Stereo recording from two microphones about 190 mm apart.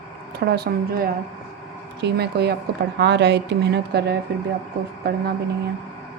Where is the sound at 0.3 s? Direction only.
55° right (ahead or behind).